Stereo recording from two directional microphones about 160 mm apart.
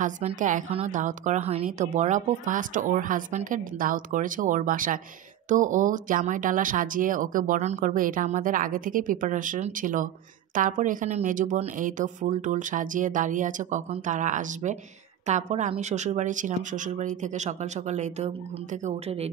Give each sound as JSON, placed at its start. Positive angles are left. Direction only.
{"t": 0.0, "sound": "speech", "side_deg": -45}
{"t": 0.7, "sound": "a woman's voice", "side_deg": -40}
{"t": 0.9, "sound": "speech", "side_deg": -50}